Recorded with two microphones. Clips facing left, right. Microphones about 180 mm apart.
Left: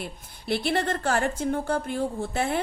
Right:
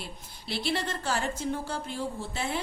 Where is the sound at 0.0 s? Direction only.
55° left (ahead or behind).